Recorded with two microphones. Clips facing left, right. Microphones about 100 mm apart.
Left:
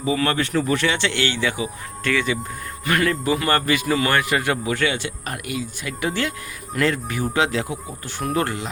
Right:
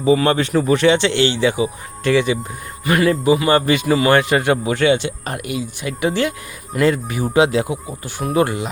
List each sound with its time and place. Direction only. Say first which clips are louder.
0.0 s speech: right 6 dB; 25° right (ahead or behind)
3.7 s speech: right 6 dB; 20° right (ahead or behind)